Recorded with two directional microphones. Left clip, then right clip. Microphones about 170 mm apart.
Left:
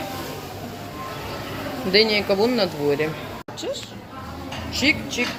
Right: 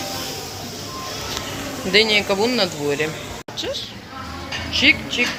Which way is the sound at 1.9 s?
15° left (ahead or behind).